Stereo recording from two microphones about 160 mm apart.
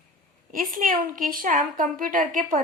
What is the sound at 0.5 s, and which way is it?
Speech, 60° right (ahead or behind).